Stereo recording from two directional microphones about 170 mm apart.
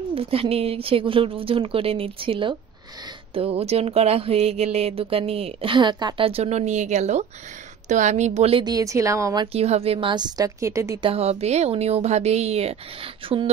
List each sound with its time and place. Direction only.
0.1 s a woman's voice: 35° right (ahead or behind)
9.5 s a woman's voice: 35° right (ahead or behind); by 11.0 s 15° right (ahead or behind)
11.0 s speech: 35° right (ahead or behind)